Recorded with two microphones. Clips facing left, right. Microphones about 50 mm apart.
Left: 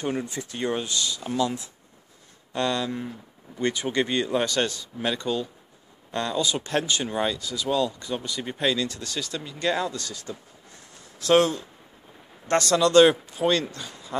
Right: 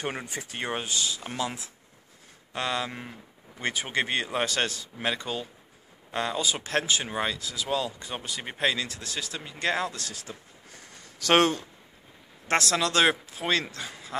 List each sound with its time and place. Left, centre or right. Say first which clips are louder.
0.0 s speech: left 4 dB; right
2.9 s speech: left 7 dB; right
3.6 s speech: left 4 dB; right
5.0 s speech: left 4 dB; centre
11.2 s speech: left 2 dB; right
12.7 s speech: left 9 dB; centre